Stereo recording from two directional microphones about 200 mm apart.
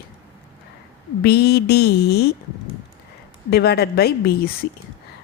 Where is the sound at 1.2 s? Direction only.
55° left (ahead or behind).